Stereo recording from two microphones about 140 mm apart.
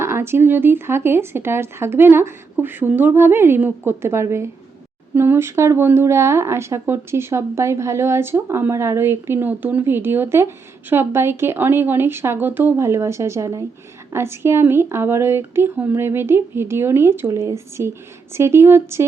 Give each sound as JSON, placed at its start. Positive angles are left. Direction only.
{"t": 0.0, "sound": "a woman's voice", "side_deg": -20}